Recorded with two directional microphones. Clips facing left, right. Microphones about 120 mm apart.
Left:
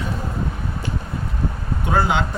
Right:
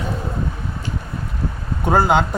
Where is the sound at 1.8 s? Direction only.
45° right (ahead or behind).